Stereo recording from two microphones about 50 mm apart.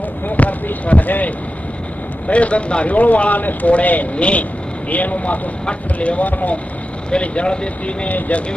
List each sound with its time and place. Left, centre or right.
0.3 s basketball bounce: left
2.2 s speech: left
7.1 s speech: left